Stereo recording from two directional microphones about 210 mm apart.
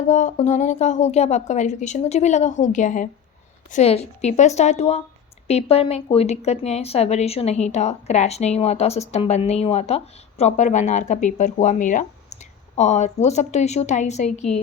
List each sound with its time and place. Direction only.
0.1 s a woman's voice: 35° left (ahead or behind)